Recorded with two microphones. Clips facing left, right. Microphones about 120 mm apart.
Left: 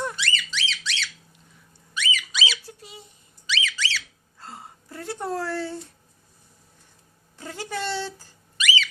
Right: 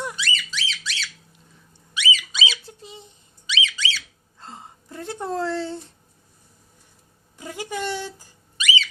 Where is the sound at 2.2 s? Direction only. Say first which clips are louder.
Right 1 dB; 25° right (ahead or behind).